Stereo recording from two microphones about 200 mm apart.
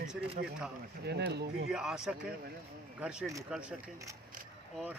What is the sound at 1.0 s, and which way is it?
Speech, 55° right (ahead or behind).